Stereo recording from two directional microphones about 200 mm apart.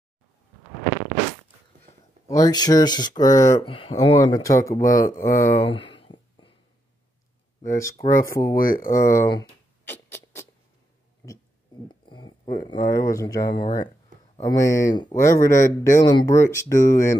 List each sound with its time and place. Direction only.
2.2 s speech: 15° left (ahead or behind)
3.6 s speech: 25° left (ahead or behind)
4.4 s speech: 15° left (ahead or behind)
5.6 s a sound: 25° left (ahead or behind)
8.1 s speech: 15° left (ahead or behind)
8.5 s speech: 45° left (ahead or behind)
9.0 s speech: 15° left (ahead or behind)
11.9 s a sound: 25° left (ahead or behind)
12.6 s speech: 20° left (ahead or behind)